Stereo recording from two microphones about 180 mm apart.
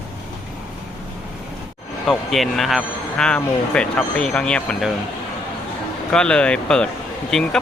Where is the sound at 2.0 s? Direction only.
Centre (ahead or behind).